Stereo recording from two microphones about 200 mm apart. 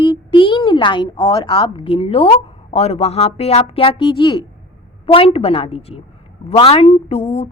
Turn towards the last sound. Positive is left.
turn(degrees=30)  # may be behind; listen again after turning